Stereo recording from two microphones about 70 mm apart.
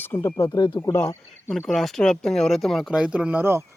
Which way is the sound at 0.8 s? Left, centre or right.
Left.